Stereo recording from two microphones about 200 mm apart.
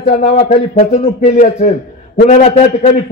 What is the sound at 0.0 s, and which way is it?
A man's voice, 40° left (ahead or behind).